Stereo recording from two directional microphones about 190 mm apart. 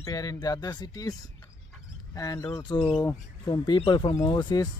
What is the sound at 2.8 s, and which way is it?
Speech, 10° left (ahead or behind).